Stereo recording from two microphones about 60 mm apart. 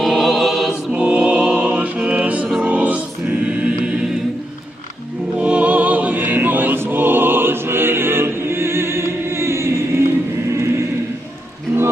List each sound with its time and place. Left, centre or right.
0.0 s choir: centre
0.9 s music: centre
2.6 s choir: right
5.4 s music: right
11.7 s music: right